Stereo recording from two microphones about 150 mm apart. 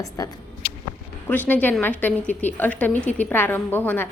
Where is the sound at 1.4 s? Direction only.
10° left (ahead or behind).